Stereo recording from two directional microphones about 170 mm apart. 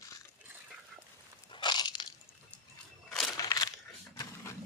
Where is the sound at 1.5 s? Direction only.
25° left (ahead or behind).